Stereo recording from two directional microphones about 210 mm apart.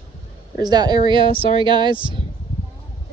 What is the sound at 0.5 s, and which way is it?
Speech, 20° right (ahead or behind).